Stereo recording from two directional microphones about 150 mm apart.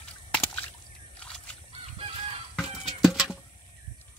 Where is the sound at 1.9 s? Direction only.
35° right (ahead or behind).